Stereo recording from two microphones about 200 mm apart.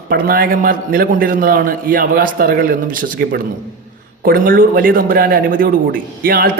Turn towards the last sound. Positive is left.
turn(degrees=-45)  # may be behind; listen again after turning